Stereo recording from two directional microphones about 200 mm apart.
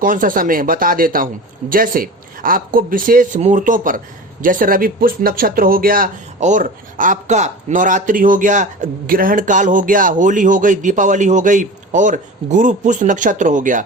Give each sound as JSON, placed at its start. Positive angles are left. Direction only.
{"t": 0.0, "sound": "speech", "side_deg": -45}